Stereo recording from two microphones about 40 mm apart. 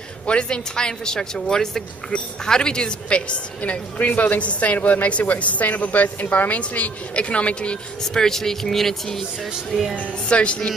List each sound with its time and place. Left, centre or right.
0.3 s a woman's voice: left
4.0 s speech: left
8.0 s speech: centre
9.7 s speech: centre
9.9 s speech: left